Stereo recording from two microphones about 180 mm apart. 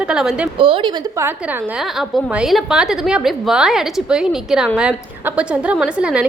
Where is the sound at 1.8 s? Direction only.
Centre (ahead or behind).